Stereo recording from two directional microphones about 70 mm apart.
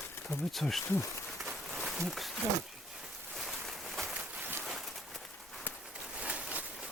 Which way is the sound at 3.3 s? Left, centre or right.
Centre.